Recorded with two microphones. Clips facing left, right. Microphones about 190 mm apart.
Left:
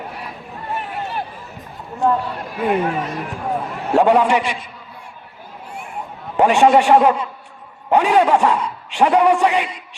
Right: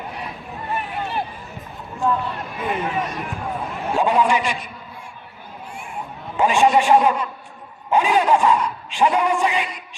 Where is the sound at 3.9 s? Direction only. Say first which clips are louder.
Left 6 dB; 65° left (ahead or behind).